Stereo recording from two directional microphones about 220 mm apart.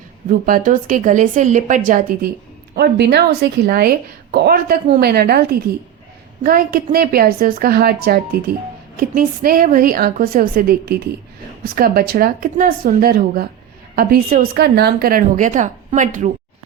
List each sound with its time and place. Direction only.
0.3 s a woman's voice: 40° right (ahead or behind)
2.7 s a woman's voice: 50° right (ahead or behind)